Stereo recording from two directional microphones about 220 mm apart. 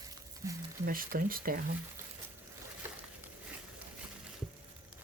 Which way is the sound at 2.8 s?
10° right (ahead or behind).